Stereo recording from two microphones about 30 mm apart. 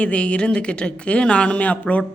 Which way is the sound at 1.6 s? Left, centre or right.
Left.